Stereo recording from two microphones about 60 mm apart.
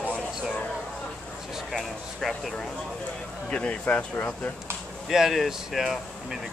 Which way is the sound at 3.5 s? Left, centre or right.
Left.